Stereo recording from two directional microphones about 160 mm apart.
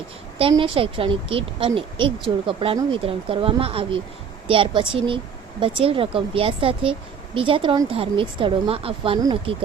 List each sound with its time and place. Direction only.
0.3 s speech: 35° right (ahead or behind)